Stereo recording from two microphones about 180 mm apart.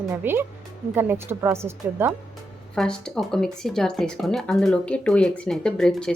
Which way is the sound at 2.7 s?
5° left (ahead or behind).